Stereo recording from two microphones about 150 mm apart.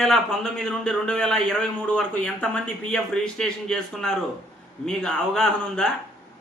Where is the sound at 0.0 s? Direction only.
5° left (ahead or behind).